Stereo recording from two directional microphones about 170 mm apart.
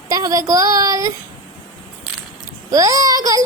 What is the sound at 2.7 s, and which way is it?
Speech, 20° right (ahead or behind).